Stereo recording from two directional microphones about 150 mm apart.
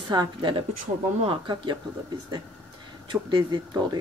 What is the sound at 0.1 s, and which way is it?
Speech, 30° right (ahead or behind).